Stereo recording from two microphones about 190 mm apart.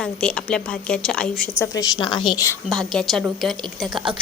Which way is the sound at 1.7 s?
20° left (ahead or behind).